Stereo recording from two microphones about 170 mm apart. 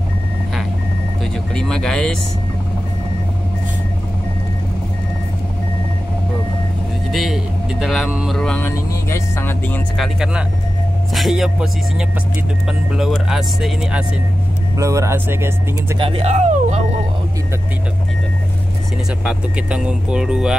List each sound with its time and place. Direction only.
1.2 s music: 5° left (ahead or behind)
7.1 s speech: centre (ahead or behind)
9.9 s speech: centre (ahead or behind)
14.8 s speech: 20° right (ahead or behind)
16.0 s speech: 30° right (ahead or behind)
19.2 s speech: 5° right (ahead or behind)